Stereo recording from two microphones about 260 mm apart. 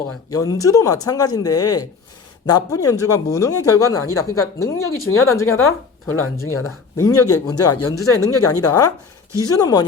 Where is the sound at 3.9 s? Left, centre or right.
Left.